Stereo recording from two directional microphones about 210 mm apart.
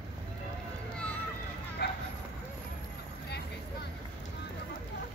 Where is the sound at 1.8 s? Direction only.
50° left (ahead or behind).